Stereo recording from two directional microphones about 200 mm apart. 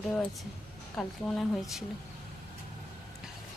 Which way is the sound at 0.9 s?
Centre (ahead or behind).